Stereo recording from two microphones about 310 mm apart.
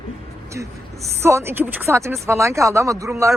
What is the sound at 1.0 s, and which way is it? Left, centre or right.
Speech, centre.